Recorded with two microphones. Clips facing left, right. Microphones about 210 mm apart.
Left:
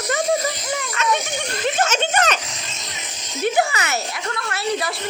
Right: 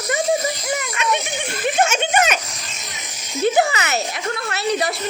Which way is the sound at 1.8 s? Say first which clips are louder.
Right 2 dB; 10° right (ahead or behind).